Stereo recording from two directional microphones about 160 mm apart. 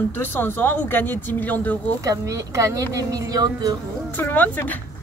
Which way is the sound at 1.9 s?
20° right (ahead or behind).